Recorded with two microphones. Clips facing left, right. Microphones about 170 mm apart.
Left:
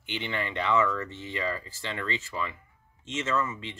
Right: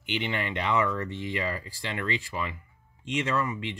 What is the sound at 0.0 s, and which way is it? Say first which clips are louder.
Speech: right 2 dB; 15° right (ahead or behind).